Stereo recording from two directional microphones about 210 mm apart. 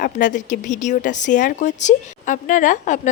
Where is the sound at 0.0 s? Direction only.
40° left (ahead or behind).